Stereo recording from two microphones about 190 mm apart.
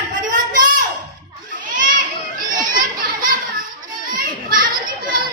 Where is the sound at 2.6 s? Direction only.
45° right (ahead or behind).